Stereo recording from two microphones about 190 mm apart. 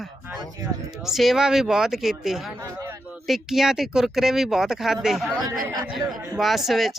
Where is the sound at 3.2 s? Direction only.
Centre (ahead or behind).